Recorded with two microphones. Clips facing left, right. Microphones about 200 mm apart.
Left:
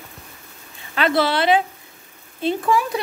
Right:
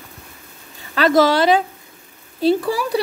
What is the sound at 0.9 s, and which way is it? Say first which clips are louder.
Speech: right 5 dB; 40° right (ahead or behind).